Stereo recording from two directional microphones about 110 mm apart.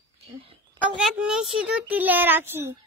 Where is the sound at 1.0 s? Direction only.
5° right (ahead or behind).